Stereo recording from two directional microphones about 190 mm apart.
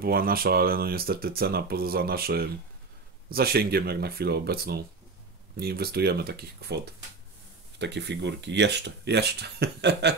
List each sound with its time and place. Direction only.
0.0 s speech: 50° right (ahead or behind)
7.8 s speech: 65° right (ahead or behind)